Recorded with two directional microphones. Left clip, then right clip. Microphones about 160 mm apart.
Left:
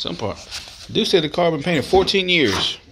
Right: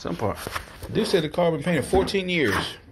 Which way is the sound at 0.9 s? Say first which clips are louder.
Left 5 dB; 35° left (ahead or behind).